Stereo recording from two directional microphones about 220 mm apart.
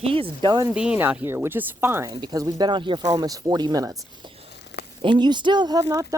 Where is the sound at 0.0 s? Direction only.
25° right (ahead or behind).